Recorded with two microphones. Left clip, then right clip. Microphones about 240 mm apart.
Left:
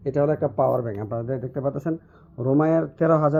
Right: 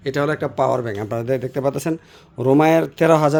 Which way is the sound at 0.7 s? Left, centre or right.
Right.